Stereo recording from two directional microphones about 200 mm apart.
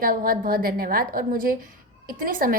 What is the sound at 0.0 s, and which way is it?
A woman's voice, 45° right (ahead or behind).